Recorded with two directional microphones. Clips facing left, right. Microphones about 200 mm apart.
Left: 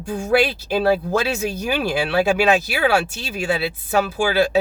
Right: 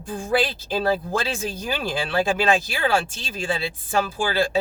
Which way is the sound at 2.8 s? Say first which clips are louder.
Left 3 dB; 70° left (ahead or behind).